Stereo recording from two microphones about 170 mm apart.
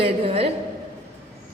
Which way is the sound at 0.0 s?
35° right (ahead or behind).